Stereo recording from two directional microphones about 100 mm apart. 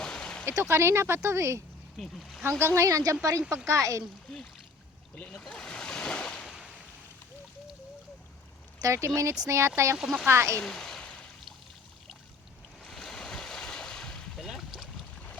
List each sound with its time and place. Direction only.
0.0 s a sound: 5° left (ahead or behind)
0.4 s speech: 25° right (ahead or behind)
2.0 s speech: centre (ahead or behind)
2.4 s speech: 25° right (ahead or behind)
4.0 s speech: centre (ahead or behind)
5.1 s a sound: 10° left (ahead or behind)
6.5 s a sound: 5° right (ahead or behind)
8.8 s speech: 30° right (ahead or behind)
10.0 s speech: centre (ahead or behind)
10.2 s speech: 30° right (ahead or behind)
10.6 s a sound: 5° left (ahead or behind)
12.8 s boat: 5° left (ahead or behind)